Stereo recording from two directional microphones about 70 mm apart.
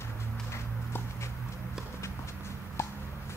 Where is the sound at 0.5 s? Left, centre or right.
Left.